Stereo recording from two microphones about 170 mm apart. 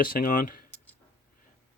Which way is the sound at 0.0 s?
55° left (ahead or behind).